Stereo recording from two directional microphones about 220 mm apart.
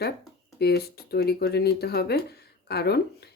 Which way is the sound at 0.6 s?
45° left (ahead or behind).